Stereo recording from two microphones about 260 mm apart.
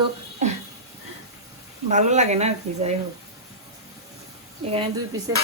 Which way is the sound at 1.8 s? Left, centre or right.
Right.